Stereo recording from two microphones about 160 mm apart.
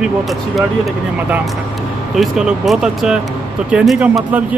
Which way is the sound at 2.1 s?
Centre (ahead or behind).